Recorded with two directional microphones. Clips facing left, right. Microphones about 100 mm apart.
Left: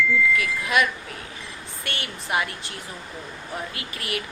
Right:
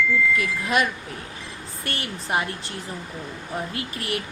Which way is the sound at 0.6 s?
30° right (ahead or behind).